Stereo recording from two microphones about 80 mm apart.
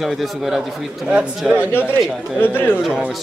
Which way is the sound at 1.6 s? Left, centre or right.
Left.